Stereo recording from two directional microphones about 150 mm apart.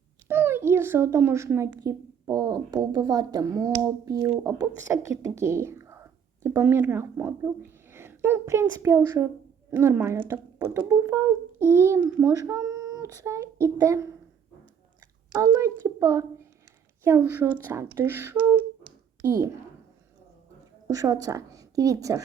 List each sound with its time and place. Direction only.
0.3 s a woman's voice: 15° right (ahead or behind)
15.3 s a woman's voice: 25° right (ahead or behind)
19.2 s a woman's voice: 20° right (ahead or behind)
20.8 s a woman's voice: 25° right (ahead or behind)